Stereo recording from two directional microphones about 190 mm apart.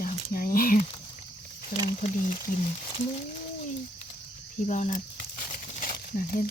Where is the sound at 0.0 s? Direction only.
50° left (ahead or behind).